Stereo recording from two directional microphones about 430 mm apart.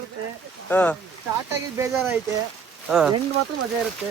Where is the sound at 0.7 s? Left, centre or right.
Centre.